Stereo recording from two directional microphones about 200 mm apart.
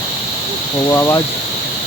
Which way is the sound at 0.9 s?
15° left (ahead or behind).